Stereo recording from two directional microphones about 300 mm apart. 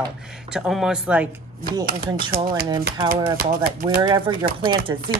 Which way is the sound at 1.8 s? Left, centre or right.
Right.